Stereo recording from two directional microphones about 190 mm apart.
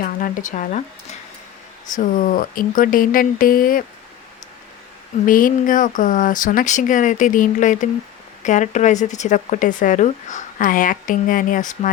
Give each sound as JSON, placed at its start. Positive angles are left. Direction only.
{"t": 0.0, "sound": "speech", "side_deg": 45}
{"t": 2.0, "sound": "speech", "side_deg": 45}
{"t": 5.2, "sound": "speech", "side_deg": 45}